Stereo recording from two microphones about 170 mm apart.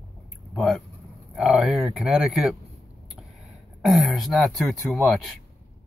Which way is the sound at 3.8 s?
Centre (ahead or behind).